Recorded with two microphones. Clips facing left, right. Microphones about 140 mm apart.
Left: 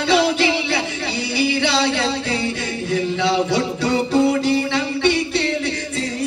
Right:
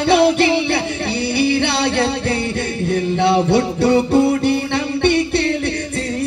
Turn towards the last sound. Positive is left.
turn(degrees=-55)  # may be behind; listen again after turning